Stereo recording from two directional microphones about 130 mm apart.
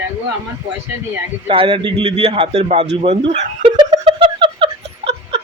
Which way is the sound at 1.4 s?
45° right (ahead or behind).